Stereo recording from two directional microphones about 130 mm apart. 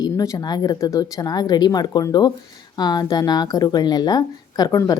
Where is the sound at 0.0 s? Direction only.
25° left (ahead or behind).